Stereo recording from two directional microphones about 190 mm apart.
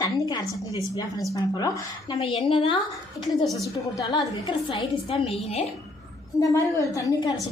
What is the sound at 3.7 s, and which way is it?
A woman's voice, 20° left (ahead or behind).